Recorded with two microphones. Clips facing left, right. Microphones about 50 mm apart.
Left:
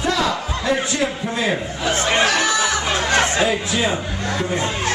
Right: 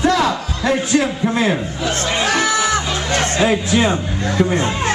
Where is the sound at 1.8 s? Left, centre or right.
Centre.